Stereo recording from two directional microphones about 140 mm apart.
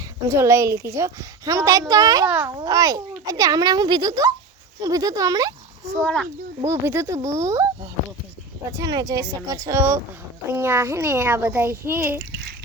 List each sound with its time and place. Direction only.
0.3 s a child's voice: 20° right (ahead or behind)
2.2 s a child's voice: 10° right (ahead or behind)
2.6 s a child's voice: 25° right (ahead or behind)
6.0 s speech: 5° left (ahead or behind)
6.7 s a child's voice: 20° right (ahead or behind)
8.8 s a child's voice: 25° right (ahead or behind)